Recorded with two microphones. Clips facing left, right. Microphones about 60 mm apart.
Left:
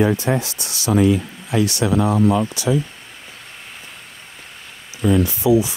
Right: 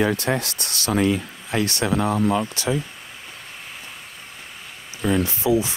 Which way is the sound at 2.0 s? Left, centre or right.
Left.